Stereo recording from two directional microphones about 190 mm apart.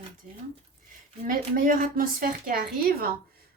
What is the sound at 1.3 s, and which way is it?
A woman's voice, 45° right (ahead or behind).